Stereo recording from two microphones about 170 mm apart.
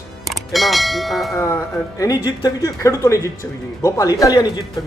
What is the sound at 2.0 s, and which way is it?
Speech, 25° left (ahead or behind).